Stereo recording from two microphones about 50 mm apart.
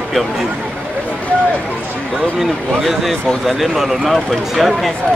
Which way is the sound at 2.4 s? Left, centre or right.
Centre.